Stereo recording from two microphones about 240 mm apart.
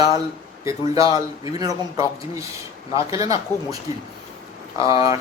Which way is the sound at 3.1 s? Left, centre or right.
Centre.